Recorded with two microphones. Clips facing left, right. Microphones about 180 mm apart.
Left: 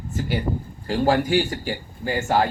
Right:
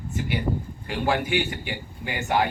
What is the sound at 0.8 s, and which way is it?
Speech, 40° left (ahead or behind).